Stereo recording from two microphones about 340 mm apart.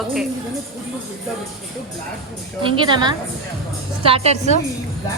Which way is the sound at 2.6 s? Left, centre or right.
Centre.